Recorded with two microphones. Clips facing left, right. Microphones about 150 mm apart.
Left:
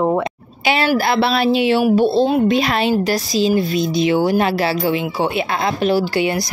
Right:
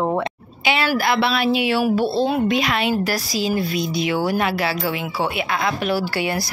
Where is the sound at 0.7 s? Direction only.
35° left (ahead or behind).